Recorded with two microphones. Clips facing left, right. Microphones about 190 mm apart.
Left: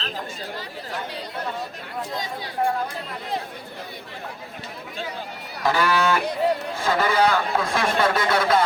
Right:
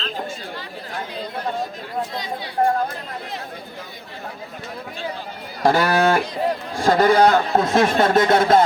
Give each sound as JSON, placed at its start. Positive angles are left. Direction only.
{"t": 2.6, "sound": "speech", "side_deg": -40}
{"t": 5.6, "sound": "speech", "side_deg": -45}